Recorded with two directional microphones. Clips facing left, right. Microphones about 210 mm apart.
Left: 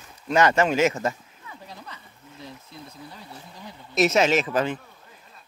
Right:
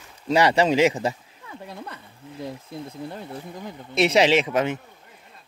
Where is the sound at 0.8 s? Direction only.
15° right (ahead or behind).